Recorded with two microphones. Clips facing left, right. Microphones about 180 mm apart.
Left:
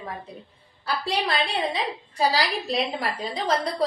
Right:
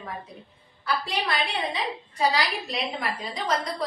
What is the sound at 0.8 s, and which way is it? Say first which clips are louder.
A woman's voice: left 2 dB; 35° left (ahead or behind).